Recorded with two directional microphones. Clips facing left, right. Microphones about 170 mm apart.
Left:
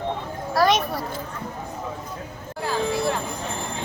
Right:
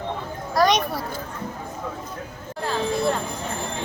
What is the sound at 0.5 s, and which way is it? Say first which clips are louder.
Speech: even; 5° left (ahead or behind).